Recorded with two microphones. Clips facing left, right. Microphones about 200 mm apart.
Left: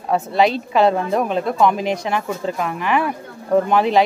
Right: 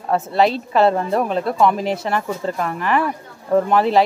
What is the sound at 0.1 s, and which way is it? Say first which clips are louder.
Speech: even; centre (ahead or behind).